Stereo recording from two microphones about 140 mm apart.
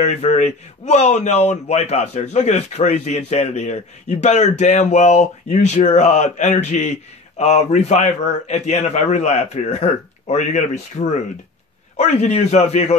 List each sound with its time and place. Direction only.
0.0 s speech: 55° left (ahead or behind)